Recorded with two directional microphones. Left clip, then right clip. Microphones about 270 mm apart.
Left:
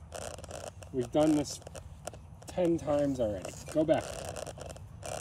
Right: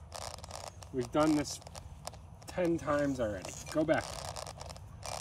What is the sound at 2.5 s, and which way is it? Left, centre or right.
Speech, centre.